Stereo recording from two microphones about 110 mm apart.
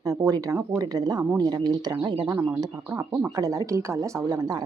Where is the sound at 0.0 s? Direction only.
35° right (ahead or behind).